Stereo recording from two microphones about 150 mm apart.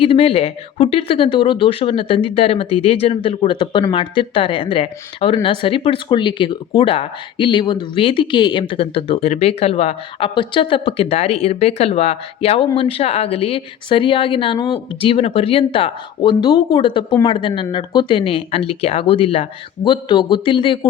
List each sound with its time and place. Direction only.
0.0 s speech: 40° left (ahead or behind)